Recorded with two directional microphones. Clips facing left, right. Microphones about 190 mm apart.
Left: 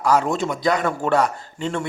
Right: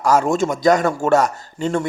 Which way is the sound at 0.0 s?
45° right (ahead or behind).